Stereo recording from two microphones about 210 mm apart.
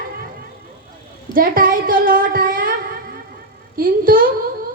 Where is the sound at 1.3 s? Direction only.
40° right (ahead or behind).